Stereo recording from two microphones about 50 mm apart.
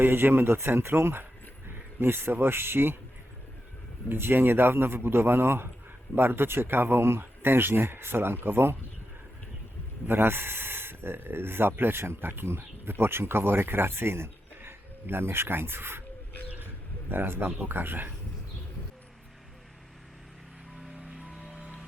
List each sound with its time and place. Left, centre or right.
0.0 s speech: right
4.1 s speech: right
10.1 s speech: right
17.1 s speech: right